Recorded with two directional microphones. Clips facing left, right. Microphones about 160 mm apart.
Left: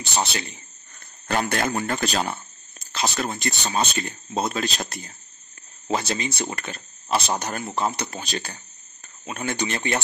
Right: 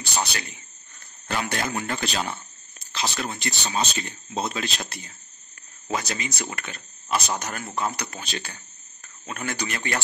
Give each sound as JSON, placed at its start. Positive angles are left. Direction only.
{"t": 0.0, "sound": "a sound", "side_deg": 25}
{"t": 1.2, "sound": "a man's voice", "side_deg": 55}
{"t": 5.9, "sound": "speech", "side_deg": 30}
{"t": 9.2, "sound": "speech", "side_deg": 20}